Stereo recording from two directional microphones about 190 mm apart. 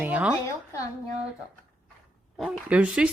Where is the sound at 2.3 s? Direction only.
Centre (ahead or behind).